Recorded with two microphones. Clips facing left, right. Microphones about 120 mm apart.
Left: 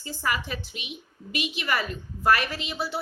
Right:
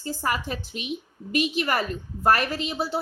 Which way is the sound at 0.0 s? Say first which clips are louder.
Right 2 dB; 40° right (ahead or behind).